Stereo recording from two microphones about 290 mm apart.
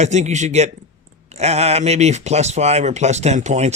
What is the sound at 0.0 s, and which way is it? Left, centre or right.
Speech, right.